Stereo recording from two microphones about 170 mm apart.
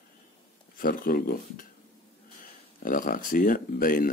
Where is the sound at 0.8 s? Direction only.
60° left (ahead or behind).